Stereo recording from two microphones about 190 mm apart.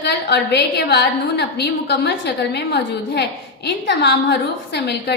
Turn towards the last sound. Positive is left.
turn(degrees=60)  # may be behind; listen again after turning